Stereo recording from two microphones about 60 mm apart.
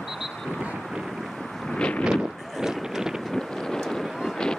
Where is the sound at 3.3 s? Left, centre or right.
Centre.